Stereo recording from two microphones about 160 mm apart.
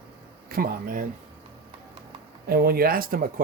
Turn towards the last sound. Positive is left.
turn(degrees=-65)  # may be behind; listen again after turning